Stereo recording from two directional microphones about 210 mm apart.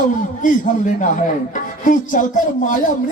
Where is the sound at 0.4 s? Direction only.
40° left (ahead or behind).